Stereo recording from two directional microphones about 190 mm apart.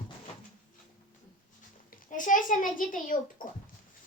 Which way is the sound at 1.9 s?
45° left (ahead or behind).